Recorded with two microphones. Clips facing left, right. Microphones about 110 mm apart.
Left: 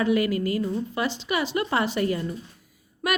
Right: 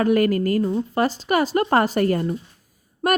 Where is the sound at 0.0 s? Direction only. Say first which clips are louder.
Right 4 dB; 50° right (ahead or behind).